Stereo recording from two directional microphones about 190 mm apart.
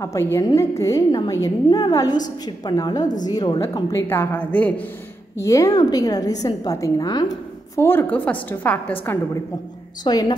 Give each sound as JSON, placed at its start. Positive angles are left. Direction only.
{"t": 0.0, "sound": "a woman's voice", "side_deg": 15}
{"t": 10.0, "sound": "a woman's voice", "side_deg": 20}